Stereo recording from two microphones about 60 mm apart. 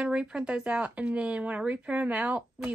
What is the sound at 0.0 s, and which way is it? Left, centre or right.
A woman's voice, centre.